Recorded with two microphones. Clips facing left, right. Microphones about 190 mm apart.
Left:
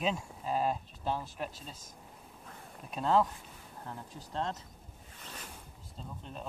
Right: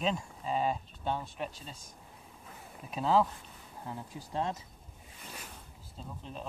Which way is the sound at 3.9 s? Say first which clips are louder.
Right 3 dB; 10° right (ahead or behind).